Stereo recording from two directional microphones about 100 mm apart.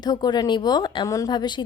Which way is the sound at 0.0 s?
45° left (ahead or behind).